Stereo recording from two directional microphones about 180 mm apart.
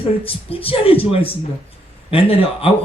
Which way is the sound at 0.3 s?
30° left (ahead or behind).